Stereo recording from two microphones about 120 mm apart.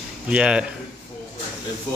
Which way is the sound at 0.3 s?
10° right (ahead or behind).